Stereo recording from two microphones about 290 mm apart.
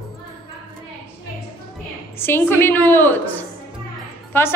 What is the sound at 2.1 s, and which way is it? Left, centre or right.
A woman's voice, centre.